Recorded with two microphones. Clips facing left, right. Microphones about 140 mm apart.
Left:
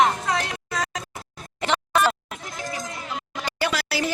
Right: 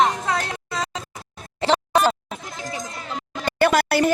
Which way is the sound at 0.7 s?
30° right (ahead or behind).